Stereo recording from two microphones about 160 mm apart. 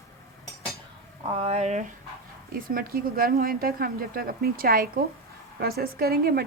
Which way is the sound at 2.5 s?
65° right (ahead or behind).